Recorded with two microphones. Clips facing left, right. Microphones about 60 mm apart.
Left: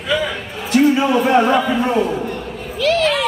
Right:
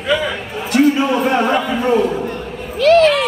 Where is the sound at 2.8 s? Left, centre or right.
Right.